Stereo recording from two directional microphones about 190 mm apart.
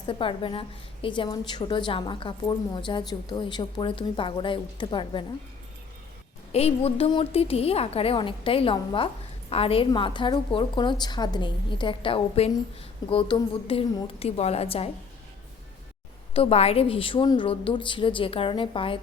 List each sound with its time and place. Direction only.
0.1 s a woman's voice: 25° left (ahead or behind)
6.5 s a woman's voice: 35° left (ahead or behind)
16.3 s a woman's voice: 30° left (ahead or behind)